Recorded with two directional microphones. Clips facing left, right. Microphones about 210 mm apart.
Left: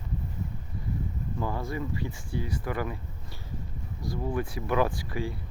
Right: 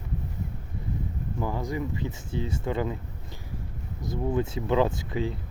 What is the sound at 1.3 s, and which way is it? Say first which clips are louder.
Speech: right 2 dB; 15° right (ahead or behind).